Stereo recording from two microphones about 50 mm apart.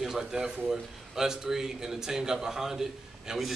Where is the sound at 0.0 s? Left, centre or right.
Centre.